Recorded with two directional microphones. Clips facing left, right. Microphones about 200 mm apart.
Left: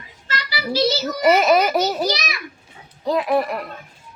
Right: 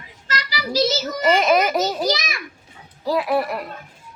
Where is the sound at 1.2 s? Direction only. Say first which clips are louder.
Left 2 dB; 5° left (ahead or behind).